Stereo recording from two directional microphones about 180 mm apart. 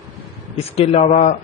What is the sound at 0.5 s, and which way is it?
Speech, 35° left (ahead or behind).